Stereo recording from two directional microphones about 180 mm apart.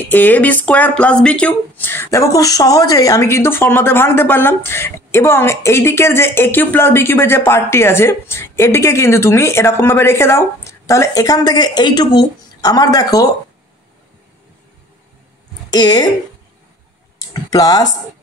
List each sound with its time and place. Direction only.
0.0 s speech: 10° left (ahead or behind)
15.7 s a woman's voice: 20° left (ahead or behind)
17.3 s speech: 20° left (ahead or behind)